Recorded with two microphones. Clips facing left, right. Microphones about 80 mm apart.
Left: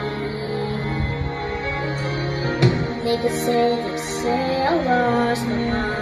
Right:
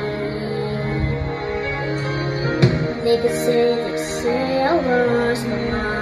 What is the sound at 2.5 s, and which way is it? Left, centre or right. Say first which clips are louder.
Music: right 1 dB; left.